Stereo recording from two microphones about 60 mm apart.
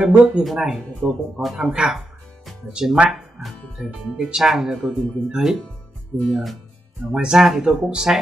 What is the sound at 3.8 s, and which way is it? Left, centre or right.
A man's voice, centre.